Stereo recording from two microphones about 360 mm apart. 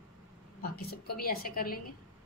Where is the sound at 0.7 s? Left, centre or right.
Left.